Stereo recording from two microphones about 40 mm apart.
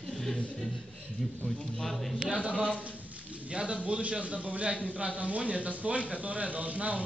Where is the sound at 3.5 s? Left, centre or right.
Right.